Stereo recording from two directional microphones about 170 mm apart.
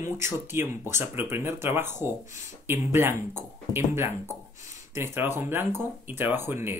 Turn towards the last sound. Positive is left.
turn(degrees=-15)  # may be behind; listen again after turning